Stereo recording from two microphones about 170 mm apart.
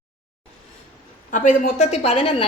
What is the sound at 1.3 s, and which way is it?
Speech, 50° left (ahead or behind).